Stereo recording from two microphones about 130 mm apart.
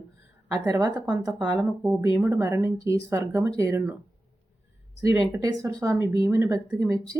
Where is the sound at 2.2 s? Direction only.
15° right (ahead or behind).